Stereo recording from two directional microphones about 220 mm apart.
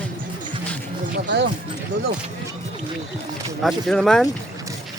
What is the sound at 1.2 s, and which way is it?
Speech, 50° right (ahead or behind).